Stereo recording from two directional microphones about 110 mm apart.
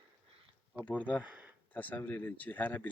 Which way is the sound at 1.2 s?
15° right (ahead or behind).